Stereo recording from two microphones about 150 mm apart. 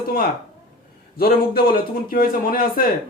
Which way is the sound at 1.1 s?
90° left.